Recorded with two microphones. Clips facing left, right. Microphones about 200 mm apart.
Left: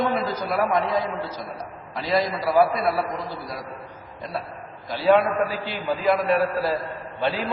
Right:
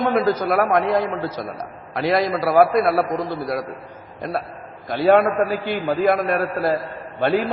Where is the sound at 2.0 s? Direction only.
65° right (ahead or behind).